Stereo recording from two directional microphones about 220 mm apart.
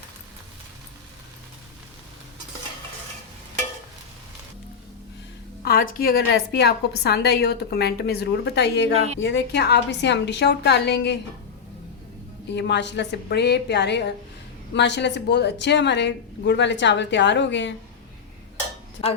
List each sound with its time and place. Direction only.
5.6 s a woman's voice: 40° left (ahead or behind)
12.5 s a woman's voice: 50° left (ahead or behind)